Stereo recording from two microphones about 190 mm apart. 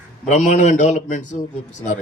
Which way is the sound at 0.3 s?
40° left (ahead or behind).